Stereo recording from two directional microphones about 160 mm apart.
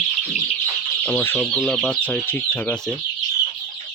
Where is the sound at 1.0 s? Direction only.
10° left (ahead or behind).